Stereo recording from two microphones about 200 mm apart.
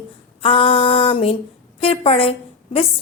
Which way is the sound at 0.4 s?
25° left (ahead or behind).